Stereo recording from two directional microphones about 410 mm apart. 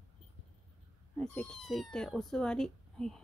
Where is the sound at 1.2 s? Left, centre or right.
Centre.